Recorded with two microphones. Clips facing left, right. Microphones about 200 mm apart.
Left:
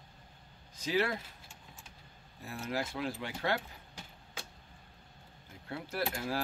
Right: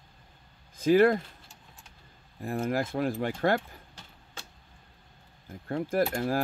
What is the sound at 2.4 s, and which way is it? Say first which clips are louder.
Speech: right 8 dB; 50° right (ahead or behind).